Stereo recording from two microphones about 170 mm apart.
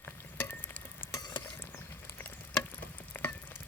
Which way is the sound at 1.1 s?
25° left (ahead or behind).